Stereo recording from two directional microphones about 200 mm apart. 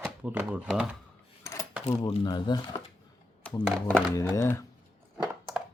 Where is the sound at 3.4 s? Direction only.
5° left (ahead or behind).